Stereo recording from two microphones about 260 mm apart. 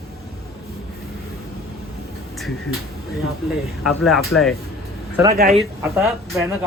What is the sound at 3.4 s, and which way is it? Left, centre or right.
Speech, centre.